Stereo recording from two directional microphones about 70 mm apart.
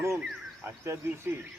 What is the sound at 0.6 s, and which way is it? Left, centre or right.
Speech, right.